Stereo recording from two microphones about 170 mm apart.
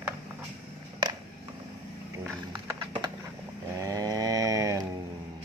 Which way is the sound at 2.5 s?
25° right (ahead or behind).